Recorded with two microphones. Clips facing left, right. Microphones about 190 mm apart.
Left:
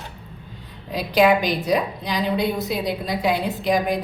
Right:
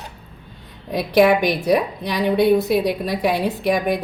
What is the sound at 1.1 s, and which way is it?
A woman's voice, 60° right (ahead or behind).